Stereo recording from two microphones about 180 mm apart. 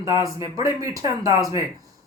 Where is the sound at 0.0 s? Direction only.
20° right (ahead or behind).